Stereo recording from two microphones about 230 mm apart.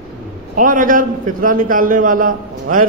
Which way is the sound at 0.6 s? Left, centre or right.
Right.